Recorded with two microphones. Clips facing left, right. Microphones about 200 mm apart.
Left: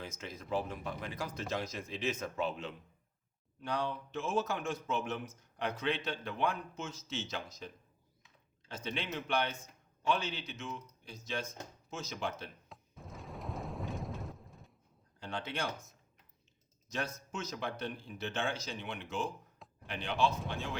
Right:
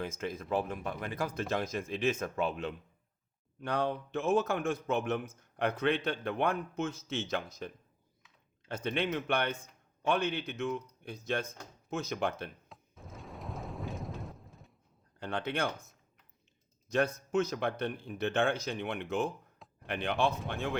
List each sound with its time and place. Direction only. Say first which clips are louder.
0.0 s a man's voice: right 8 dB; 55° right (ahead or behind)
12.6 s a sound: even; centre (ahead or behind)
15.2 s a man's voice: right 5 dB; 55° right (ahead or behind)
16.9 s a man's voice: right 10 dB; 55° right (ahead or behind)